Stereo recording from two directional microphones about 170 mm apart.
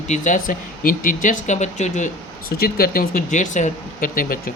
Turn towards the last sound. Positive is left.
turn(degrees=55)  # may be behind; listen again after turning